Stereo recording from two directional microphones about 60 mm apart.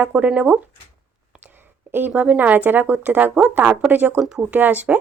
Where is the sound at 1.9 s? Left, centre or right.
Right.